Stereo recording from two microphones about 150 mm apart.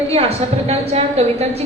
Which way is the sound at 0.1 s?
40° right (ahead or behind).